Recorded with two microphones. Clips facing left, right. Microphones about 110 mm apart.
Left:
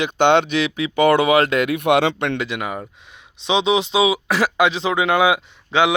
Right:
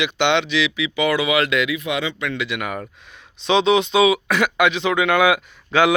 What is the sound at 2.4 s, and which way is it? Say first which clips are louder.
Speech: left 1 dB; 35° left (ahead or behind).